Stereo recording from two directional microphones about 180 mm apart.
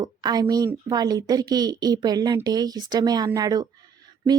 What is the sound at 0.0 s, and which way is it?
Speech, 20° right (ahead or behind).